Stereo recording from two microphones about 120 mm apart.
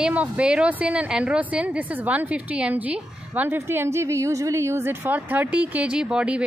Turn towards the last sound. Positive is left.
turn(degrees=-10)  # may be behind; listen again after turning